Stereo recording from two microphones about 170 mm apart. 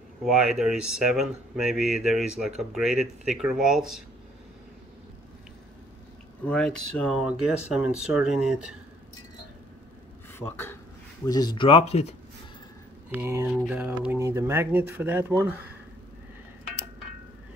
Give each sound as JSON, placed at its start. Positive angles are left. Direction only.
{"t": 0.2, "sound": "speech", "side_deg": -5}
{"t": 6.4, "sound": "speech", "side_deg": 5}
{"t": 10.4, "sound": "speech", "side_deg": 15}
{"t": 13.1, "sound": "speech", "side_deg": -15}